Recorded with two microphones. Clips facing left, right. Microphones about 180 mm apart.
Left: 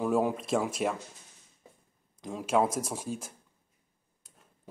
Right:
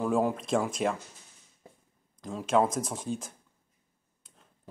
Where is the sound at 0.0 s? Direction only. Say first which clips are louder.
Even; 5° left (ahead or behind).